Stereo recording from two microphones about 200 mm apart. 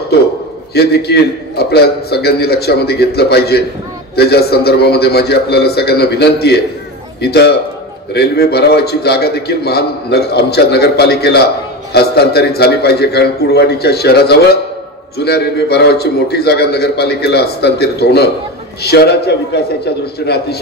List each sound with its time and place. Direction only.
0.7 s a man's voice: 55° left (ahead or behind)